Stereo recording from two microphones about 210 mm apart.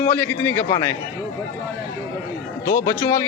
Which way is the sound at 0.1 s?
10° left (ahead or behind).